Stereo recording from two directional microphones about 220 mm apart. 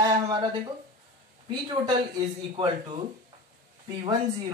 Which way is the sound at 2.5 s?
25° right (ahead or behind).